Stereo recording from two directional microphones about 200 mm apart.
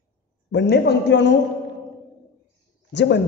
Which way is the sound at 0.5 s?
60° left (ahead or behind).